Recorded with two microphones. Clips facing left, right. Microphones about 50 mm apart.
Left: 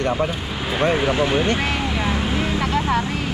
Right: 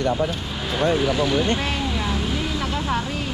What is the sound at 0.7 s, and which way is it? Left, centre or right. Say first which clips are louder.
Vehicle: left 1 dB; left.